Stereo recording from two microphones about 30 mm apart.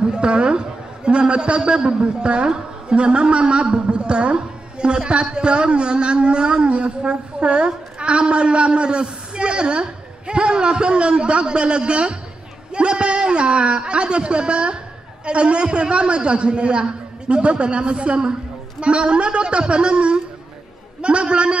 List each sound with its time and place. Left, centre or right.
0.0 s a man's voice: right